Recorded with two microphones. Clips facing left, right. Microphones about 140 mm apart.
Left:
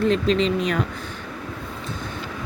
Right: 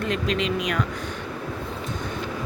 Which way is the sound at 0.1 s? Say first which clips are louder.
Left 5 dB; 30° left (ahead or behind).